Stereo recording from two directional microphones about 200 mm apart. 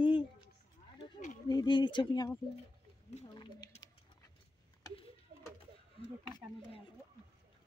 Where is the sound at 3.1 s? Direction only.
30° left (ahead or behind).